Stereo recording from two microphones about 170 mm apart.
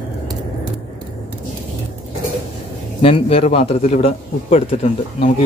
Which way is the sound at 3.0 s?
35° left (ahead or behind).